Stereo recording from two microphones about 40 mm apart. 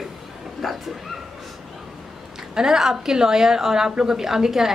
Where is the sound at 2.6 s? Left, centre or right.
Centre.